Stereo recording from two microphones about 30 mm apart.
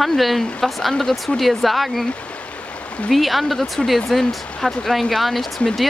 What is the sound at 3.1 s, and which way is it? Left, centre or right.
Speech, centre.